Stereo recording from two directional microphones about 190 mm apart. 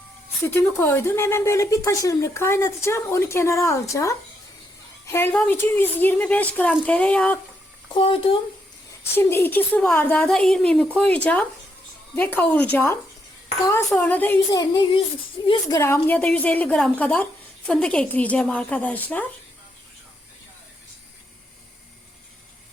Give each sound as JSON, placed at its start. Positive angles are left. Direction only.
{"t": 0.8, "sound": "a woman's voice", "side_deg": 15}
{"t": 7.9, "sound": "speech", "side_deg": 25}
{"t": 9.1, "sound": "a woman's voice", "side_deg": 10}
{"t": 14.5, "sound": "a woman's voice", "side_deg": 20}